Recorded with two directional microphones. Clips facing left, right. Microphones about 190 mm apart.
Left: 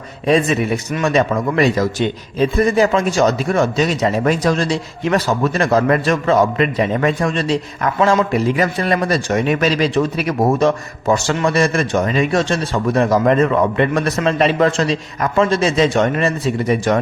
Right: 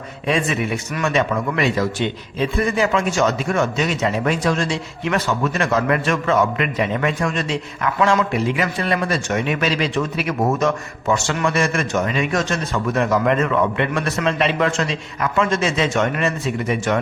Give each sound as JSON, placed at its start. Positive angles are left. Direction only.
{"t": 0.3, "sound": "a man's voice", "side_deg": 40}